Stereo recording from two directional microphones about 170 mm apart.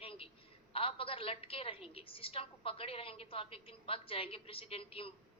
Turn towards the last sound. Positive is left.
turn(degrees=35)  # may be behind; listen again after turning